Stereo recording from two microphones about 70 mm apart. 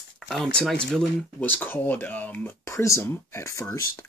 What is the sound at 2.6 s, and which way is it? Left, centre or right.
Speech, left.